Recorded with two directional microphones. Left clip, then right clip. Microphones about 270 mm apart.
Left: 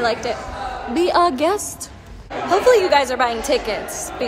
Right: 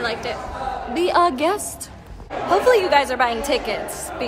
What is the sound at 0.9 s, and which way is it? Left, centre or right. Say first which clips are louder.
A woman's voice: left 1 dB; centre.